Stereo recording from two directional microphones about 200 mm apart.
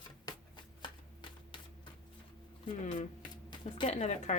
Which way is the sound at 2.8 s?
35° left (ahead or behind).